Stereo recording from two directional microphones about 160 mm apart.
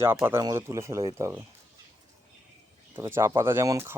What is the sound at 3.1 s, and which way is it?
Speech, 15° right (ahead or behind).